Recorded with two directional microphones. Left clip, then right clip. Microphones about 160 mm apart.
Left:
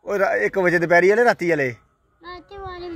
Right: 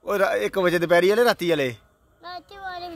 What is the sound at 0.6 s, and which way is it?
Speech, 40° right (ahead or behind).